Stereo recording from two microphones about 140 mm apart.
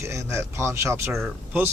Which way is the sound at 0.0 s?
20° right (ahead or behind).